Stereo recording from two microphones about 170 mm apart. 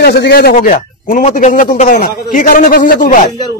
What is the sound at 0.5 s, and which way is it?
Speech, 50° left (ahead or behind).